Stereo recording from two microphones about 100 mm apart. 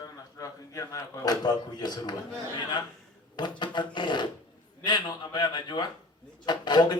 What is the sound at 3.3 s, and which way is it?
A man's voice, 50° left (ahead or behind).